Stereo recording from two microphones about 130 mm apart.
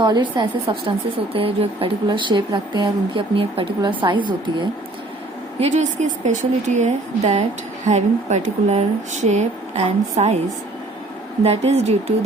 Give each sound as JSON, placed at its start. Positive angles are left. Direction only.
{"t": 0.0, "sound": "speech", "side_deg": -35}
{"t": 1.3, "sound": "speech", "side_deg": -45}
{"t": 5.5, "sound": "a woman's voice", "side_deg": -55}
{"t": 11.4, "sound": "a woman's voice", "side_deg": -55}